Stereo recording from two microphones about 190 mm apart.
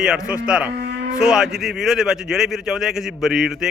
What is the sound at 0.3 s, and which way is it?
A man's voice, 5° right (ahead or behind).